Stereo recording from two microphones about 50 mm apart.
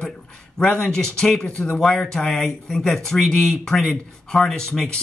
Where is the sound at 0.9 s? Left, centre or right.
Centre.